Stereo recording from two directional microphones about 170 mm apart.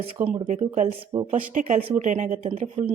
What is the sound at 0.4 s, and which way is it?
Speech, 40° right (ahead or behind).